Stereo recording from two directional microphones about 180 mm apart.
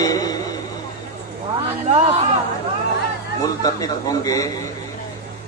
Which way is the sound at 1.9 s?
35° right (ahead or behind).